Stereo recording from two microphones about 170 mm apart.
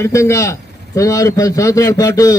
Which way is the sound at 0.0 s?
15° left (ahead or behind).